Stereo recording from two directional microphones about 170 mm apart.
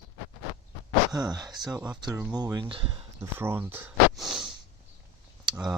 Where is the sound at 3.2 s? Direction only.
15° right (ahead or behind).